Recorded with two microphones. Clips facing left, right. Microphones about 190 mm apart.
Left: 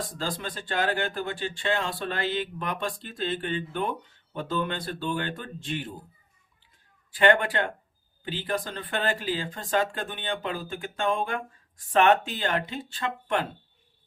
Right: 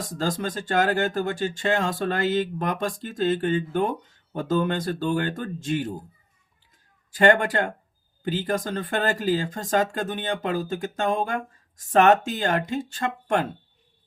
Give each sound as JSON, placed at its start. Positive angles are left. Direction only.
{"t": 0.2, "sound": "speech", "side_deg": -45}
{"t": 7.1, "sound": "speech", "side_deg": -45}